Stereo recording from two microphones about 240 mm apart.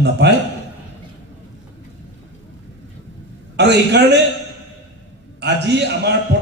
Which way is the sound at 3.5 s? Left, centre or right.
Right.